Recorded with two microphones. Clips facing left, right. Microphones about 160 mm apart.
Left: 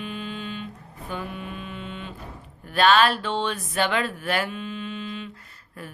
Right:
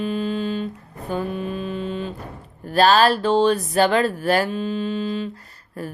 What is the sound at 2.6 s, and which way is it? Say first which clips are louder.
Speech: right 3 dB; 35° right (ahead or behind).